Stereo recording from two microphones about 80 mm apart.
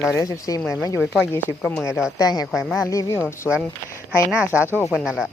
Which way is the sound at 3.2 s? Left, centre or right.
Centre.